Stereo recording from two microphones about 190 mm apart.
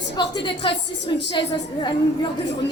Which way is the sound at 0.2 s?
25° left (ahead or behind).